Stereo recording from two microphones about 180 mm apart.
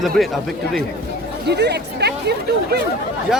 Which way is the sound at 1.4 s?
65° right (ahead or behind).